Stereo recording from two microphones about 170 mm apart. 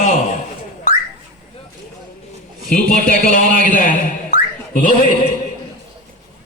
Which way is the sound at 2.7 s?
55° left (ahead or behind).